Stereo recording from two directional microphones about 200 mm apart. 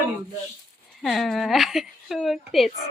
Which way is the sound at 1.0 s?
Centre (ahead or behind).